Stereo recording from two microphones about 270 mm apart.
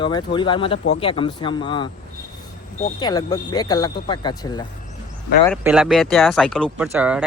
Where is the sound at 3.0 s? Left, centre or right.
Centre.